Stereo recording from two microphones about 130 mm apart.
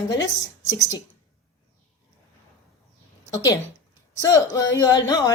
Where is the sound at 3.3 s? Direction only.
30° left (ahead or behind).